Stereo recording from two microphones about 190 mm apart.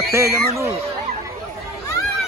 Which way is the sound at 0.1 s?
15° right (ahead or behind).